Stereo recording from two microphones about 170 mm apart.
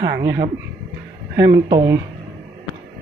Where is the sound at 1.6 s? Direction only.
20° right (ahead or behind).